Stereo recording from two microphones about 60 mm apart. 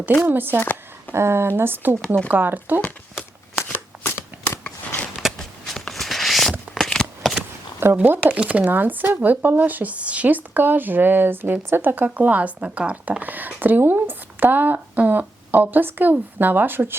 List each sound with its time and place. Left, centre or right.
0.3 s speech: right
0.6 s a sound: left
1.1 s speech: right
3.7 s shuffling cards: left
5.1 s a sound: centre
6.7 s shuffling cards: centre
8.0 s speech: right
8.3 s speech: right